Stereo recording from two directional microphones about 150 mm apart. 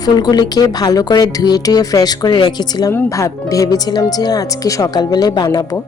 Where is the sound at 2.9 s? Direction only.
15° left (ahead or behind).